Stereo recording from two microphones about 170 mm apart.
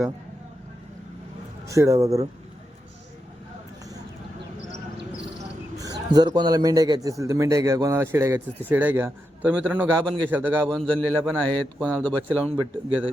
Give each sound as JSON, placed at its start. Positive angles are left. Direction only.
{"t": 1.6, "sound": "a man's voice", "side_deg": -20}
{"t": 5.8, "sound": "a man's voice", "side_deg": -20}
{"t": 10.7, "sound": "a man's voice", "side_deg": 5}
{"t": 12.3, "sound": "a man's voice", "side_deg": -10}